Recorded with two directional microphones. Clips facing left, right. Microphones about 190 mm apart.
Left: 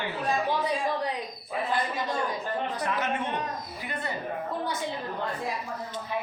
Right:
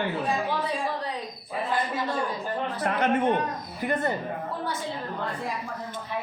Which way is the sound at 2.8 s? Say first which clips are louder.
Right 7 dB; 55° right (ahead or behind).